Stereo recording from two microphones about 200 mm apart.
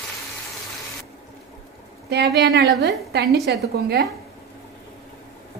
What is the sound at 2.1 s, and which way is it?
A woman's voice, 55° right (ahead or behind).